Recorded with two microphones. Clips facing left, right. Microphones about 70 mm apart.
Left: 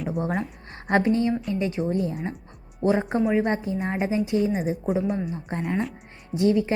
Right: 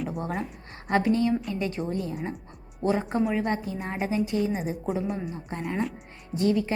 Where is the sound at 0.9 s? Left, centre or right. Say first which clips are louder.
Left 2 dB; left.